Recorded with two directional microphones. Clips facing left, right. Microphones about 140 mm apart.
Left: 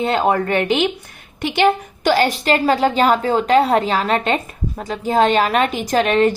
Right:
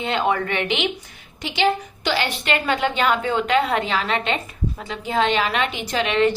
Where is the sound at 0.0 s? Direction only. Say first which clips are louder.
Left 5 dB; 40° left (ahead or behind).